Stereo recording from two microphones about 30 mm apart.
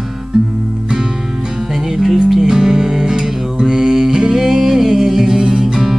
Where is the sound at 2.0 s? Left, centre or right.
Centre.